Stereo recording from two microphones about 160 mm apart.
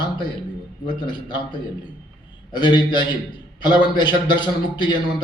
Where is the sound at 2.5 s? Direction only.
30° left (ahead or behind).